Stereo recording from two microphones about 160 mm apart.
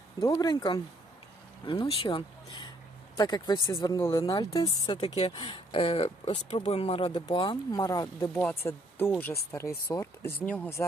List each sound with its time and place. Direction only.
0.2 s speech: 20° left (ahead or behind)
8.4 s speech: 10° left (ahead or behind)